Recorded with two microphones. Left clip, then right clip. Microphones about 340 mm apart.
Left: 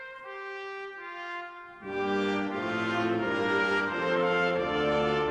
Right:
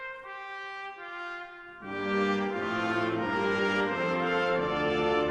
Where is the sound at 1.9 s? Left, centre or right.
Right.